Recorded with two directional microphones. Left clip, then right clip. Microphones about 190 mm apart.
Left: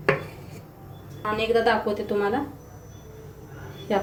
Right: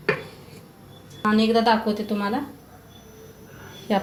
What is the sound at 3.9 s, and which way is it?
Speech, 45° right (ahead or behind).